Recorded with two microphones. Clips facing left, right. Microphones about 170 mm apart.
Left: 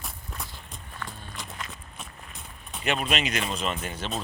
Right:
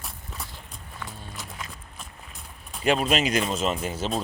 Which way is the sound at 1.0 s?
5° right (ahead or behind).